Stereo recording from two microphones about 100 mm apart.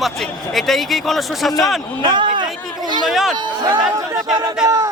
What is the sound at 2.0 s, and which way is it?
Speech, 50° right (ahead or behind).